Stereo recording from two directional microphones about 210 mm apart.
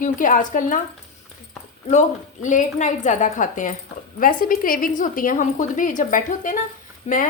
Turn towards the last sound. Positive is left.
turn(degrees=30)  # may be behind; listen again after turning